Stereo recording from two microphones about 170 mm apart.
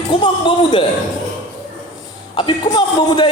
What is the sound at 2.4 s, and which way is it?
Speech, 25° left (ahead or behind).